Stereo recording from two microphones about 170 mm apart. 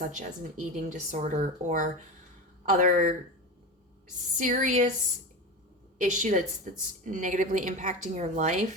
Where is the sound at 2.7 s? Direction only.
50° right (ahead or behind).